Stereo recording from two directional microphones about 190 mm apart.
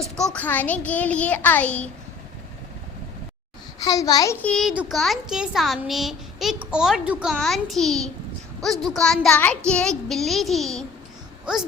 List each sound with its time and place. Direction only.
0.0 s a child's voice: 5° left (ahead or behind)
3.8 s a child's voice: 20° left (ahead or behind)
4.4 s a child's voice: 5° left (ahead or behind)